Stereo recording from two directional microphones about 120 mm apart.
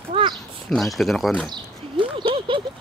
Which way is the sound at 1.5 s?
45° right (ahead or behind).